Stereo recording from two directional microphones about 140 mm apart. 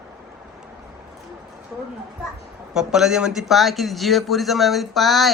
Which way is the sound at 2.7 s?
5° right (ahead or behind).